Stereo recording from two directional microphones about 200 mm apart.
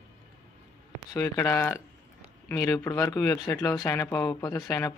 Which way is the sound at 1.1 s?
15° left (ahead or behind).